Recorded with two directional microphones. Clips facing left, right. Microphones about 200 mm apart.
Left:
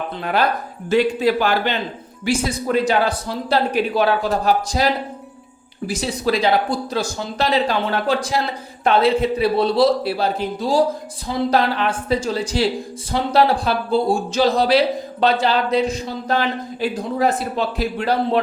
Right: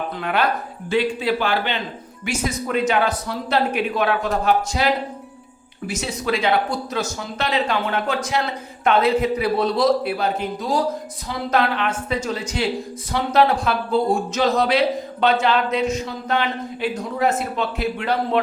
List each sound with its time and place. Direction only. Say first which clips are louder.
0.2 s a man's voice: left 2 dB; 35° left (ahead or behind)
2.2 s speech: left 4 dB; 30° left (ahead or behind)
5.9 s speech: left 3 dB; 35° left (ahead or behind)